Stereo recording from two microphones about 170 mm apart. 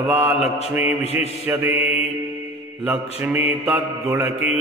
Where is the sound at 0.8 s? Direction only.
40° left (ahead or behind).